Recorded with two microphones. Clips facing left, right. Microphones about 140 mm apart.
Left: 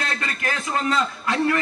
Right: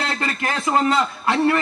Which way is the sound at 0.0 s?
30° right (ahead or behind).